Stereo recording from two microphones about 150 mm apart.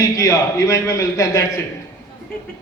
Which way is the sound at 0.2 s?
20° left (ahead or behind).